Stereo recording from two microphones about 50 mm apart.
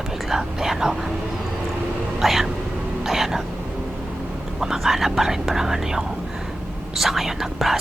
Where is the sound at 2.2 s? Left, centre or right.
Centre.